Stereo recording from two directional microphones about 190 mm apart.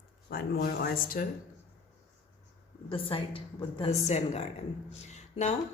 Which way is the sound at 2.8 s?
30° left (ahead or behind).